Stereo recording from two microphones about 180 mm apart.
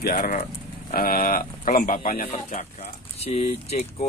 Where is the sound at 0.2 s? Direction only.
50° left (ahead or behind).